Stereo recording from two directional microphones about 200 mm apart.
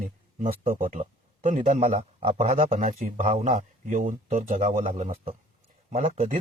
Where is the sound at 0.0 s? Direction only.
45° right (ahead or behind).